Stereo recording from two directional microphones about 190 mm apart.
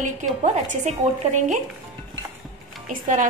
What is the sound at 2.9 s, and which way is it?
Speech, 45° right (ahead or behind).